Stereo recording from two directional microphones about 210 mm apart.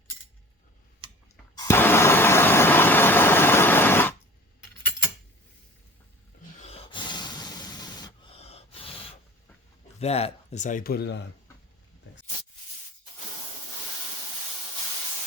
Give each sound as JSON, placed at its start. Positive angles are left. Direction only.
{"t": 1.5, "sound": "vehicle", "side_deg": 10}
{"t": 6.6, "sound": "a sound", "side_deg": 30}
{"t": 10.0, "sound": "speech", "side_deg": 30}